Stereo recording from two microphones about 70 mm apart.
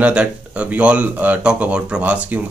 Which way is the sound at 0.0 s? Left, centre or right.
Centre.